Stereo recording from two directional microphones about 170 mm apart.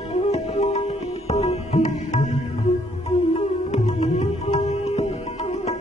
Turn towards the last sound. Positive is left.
turn(degrees=40)  # may be behind; listen again after turning